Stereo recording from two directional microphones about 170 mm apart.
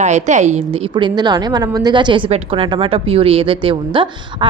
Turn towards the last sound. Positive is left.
turn(degrees=-30)  # may be behind; listen again after turning